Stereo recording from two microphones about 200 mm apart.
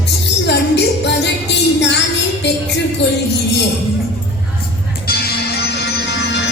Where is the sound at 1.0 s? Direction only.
60° left (ahead or behind).